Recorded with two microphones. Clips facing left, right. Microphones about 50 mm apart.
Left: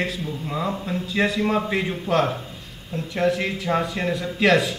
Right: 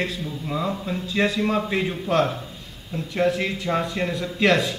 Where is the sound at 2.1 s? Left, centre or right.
Left.